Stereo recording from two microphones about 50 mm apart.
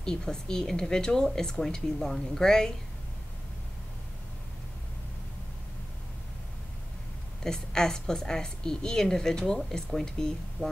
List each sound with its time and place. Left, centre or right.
0.0 s speech: centre
7.4 s speech: centre